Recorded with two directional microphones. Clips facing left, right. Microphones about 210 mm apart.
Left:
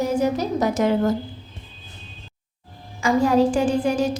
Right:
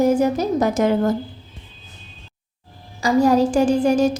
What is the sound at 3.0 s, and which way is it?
A woman's voice, 40° right (ahead or behind).